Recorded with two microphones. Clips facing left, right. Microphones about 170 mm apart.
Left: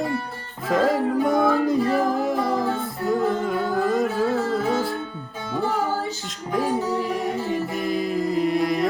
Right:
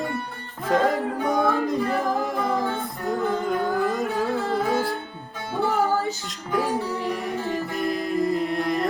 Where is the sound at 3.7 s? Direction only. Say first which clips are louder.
Left 2 dB; centre (ahead or behind).